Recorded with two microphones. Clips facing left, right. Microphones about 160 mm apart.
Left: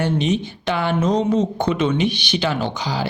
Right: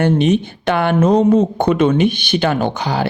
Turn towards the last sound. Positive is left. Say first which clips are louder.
# right 5 dB
turn(degrees=-60)  # may be behind; listen again after turning